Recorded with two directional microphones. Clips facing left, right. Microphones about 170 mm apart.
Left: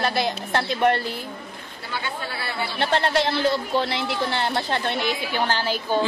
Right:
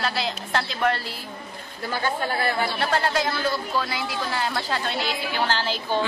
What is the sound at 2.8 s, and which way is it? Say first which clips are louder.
Speech: left 7 dB; 25° left (ahead or behind).